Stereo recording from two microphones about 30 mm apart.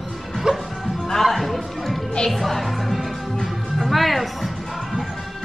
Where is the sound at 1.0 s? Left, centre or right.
Centre.